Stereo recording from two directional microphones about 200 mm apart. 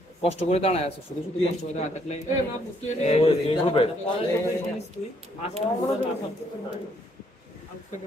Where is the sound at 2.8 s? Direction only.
35° left (ahead or behind).